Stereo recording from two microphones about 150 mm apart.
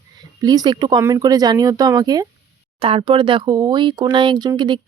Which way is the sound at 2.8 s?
40° right (ahead or behind).